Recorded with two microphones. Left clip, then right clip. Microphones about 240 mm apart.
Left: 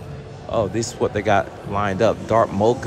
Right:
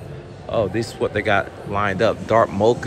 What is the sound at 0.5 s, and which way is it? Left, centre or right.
Speech, centre.